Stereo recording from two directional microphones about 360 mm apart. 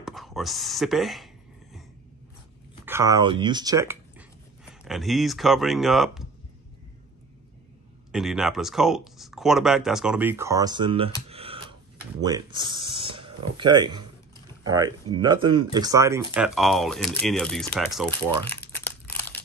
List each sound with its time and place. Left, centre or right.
0.0 s a sound: centre
2.8 s speech: centre
8.1 s speech: centre
11.2 s a sound: centre
12.2 s speech: centre
18.5 s crushing: centre